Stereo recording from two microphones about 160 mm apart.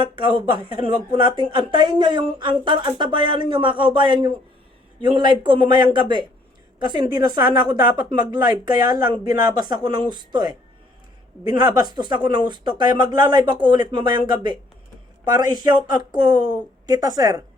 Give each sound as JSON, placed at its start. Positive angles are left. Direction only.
{"t": 0.2, "sound": "a woman's voice", "side_deg": -30}
{"t": 11.6, "sound": "a woman's voice", "side_deg": -25}